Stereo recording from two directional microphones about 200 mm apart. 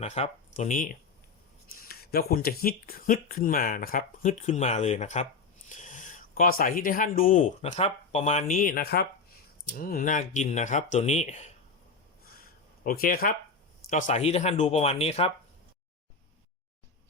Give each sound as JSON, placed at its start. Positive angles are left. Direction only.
{"t": 0.0, "sound": "speech", "side_deg": 35}
{"t": 12.2, "sound": "a sound", "side_deg": 45}
{"t": 13.9, "sound": "speech", "side_deg": 35}